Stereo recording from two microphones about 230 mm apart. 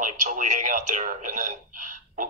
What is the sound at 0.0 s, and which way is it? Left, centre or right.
Speech, right.